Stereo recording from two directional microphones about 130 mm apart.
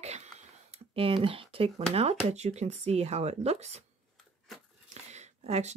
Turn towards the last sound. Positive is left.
turn(degrees=-60)  # may be behind; listen again after turning